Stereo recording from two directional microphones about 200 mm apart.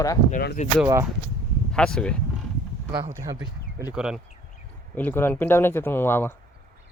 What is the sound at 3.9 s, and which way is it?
Speech, 5° right (ahead or behind).